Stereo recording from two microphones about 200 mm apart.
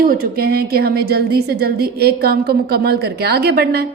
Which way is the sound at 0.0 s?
50° right (ahead or behind).